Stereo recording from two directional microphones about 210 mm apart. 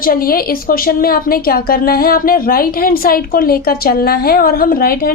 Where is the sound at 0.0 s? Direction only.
45° left (ahead or behind).